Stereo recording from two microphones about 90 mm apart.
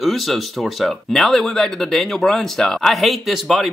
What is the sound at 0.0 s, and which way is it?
Speech, centre (ahead or behind).